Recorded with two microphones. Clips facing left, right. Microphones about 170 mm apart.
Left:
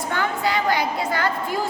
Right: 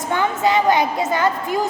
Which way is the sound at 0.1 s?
20° right (ahead or behind).